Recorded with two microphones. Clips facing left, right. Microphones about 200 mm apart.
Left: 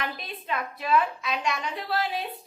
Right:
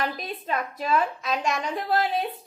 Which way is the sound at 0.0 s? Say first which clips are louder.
Right 5 dB; 40° right (ahead or behind).